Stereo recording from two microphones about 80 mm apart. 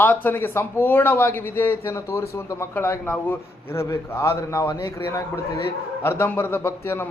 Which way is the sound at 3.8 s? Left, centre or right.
Left.